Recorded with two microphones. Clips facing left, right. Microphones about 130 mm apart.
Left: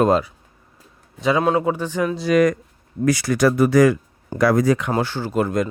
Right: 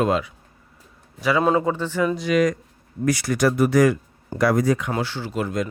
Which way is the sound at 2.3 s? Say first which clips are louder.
Left 4 dB; 60° left (ahead or behind).